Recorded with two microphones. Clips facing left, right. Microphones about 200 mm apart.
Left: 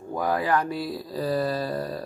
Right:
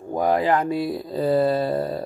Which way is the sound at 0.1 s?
20° right (ahead or behind).